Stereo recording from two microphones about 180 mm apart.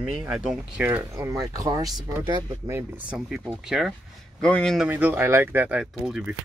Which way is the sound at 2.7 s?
10° right (ahead or behind).